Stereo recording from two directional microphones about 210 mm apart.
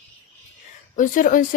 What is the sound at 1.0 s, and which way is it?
Speech, 40° left (ahead or behind).